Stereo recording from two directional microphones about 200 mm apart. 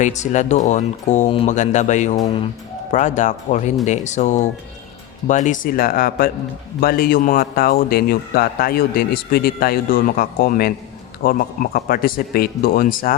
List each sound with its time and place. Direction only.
0.0 s a man's voice: 35° left (ahead or behind)